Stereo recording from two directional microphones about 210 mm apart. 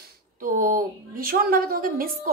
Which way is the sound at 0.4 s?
40° right (ahead or behind).